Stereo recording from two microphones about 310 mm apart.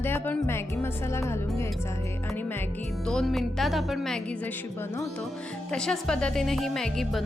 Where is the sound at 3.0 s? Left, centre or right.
Centre.